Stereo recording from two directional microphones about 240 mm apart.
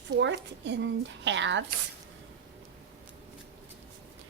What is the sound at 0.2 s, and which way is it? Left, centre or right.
Speech, right.